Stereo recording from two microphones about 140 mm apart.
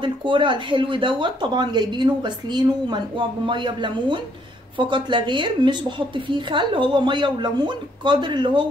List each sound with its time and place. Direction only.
0.0 s speech: 35° right (ahead or behind)